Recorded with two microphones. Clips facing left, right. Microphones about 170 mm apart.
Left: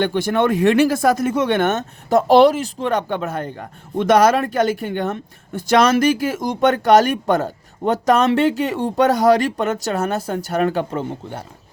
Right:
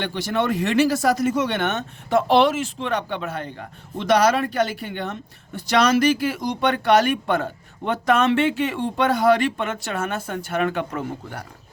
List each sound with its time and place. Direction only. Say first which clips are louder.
0.0 s speech: left 6 dB; 50° left (ahead or behind); by 11.4 s 25° left (ahead or behind)